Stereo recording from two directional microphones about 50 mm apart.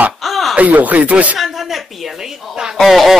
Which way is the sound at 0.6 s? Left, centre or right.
Right.